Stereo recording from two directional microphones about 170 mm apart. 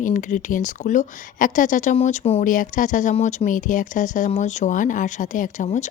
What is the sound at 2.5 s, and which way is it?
A woman's voice, 50° left (ahead or behind).